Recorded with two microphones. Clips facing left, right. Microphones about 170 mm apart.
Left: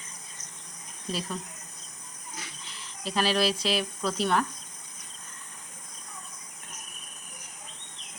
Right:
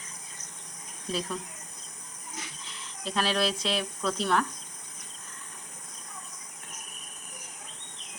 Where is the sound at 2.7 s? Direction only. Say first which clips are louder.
Left 1 dB; centre (ahead or behind).